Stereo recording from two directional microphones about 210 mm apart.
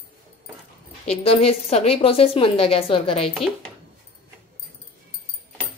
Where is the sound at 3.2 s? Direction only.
Centre (ahead or behind).